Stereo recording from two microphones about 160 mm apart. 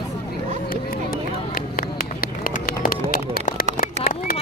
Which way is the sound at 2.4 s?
60° left (ahead or behind).